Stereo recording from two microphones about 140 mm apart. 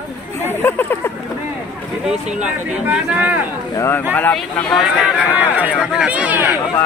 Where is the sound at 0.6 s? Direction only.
15° left (ahead or behind).